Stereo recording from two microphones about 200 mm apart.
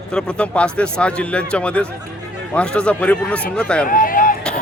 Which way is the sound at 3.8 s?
40° left (ahead or behind).